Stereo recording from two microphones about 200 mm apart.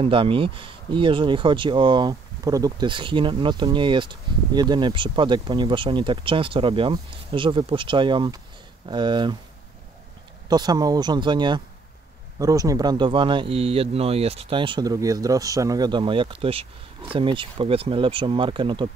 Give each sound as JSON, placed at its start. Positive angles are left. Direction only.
{"t": 0.0, "sound": "speech", "side_deg": -25}
{"t": 10.5, "sound": "speech", "side_deg": -20}